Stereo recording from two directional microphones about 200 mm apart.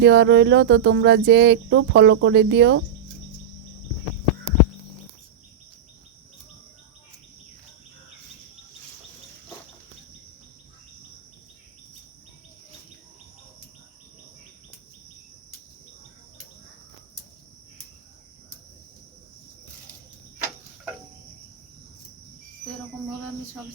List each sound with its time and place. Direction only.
0.0 s cricket: 60° right (ahead or behind)